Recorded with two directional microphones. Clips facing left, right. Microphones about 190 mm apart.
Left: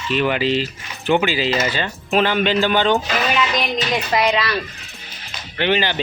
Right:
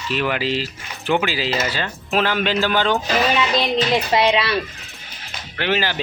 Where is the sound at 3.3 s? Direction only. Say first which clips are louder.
Right 2 dB; 30° right (ahead or behind).